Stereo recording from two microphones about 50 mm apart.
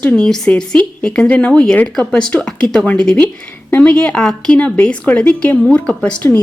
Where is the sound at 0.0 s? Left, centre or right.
Centre.